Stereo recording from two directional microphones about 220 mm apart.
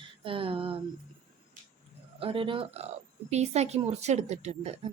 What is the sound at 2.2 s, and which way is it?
A woman's voice, 25° right (ahead or behind).